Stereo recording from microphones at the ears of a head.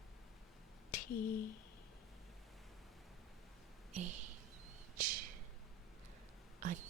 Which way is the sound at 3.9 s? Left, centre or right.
Right.